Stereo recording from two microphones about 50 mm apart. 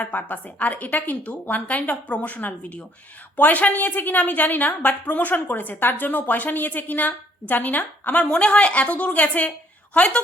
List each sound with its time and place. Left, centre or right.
0.0 s a woman's voice: left
8.3 s a woman's voice: left